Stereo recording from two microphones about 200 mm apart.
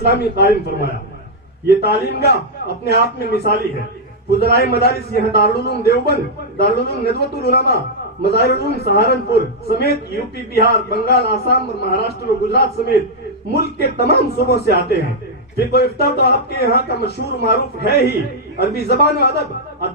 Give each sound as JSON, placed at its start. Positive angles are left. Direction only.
{"t": 0.1, "sound": "a man's voice", "side_deg": 55}